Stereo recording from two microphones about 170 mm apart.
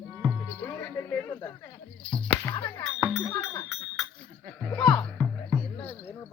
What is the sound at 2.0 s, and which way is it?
Speech, 5° left (ahead or behind).